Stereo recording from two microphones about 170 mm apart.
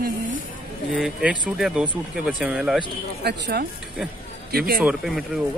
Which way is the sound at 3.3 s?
75° right (ahead or behind).